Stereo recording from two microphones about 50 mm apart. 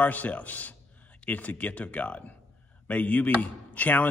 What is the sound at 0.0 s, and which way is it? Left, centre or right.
A man's voice, left.